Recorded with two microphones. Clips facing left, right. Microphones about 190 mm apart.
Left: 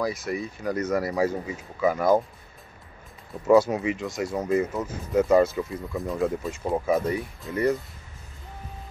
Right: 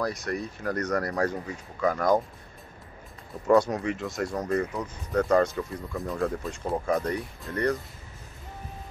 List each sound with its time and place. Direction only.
0.0 s speech: centre (ahead or behind)
3.4 s speech: 5° left (ahead or behind)